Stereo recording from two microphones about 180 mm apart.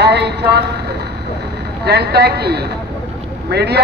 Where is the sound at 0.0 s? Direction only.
70° right (ahead or behind).